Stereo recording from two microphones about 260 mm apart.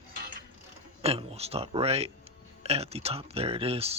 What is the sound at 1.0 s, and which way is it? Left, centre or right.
Speech, right.